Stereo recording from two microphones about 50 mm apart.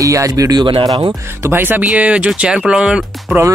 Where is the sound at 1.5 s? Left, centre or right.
Right.